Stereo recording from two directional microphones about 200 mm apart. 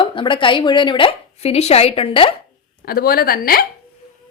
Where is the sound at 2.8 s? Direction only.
50° left (ahead or behind).